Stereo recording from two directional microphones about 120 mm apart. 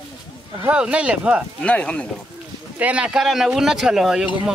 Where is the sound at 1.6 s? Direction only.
10° left (ahead or behind).